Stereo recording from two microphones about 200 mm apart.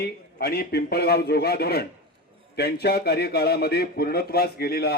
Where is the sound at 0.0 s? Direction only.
50° left (ahead or behind).